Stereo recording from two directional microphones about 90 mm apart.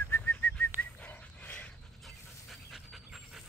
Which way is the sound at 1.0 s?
20° left (ahead or behind).